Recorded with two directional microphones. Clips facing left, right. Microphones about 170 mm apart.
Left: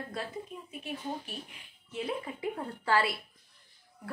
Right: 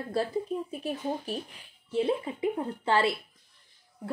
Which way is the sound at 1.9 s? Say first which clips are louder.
Right 8 dB; 25° right (ahead or behind).